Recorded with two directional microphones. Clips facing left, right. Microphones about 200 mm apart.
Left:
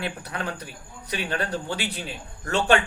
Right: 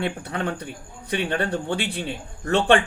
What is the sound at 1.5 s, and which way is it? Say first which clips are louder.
Speech: right 4 dB; 65° right (ahead or behind).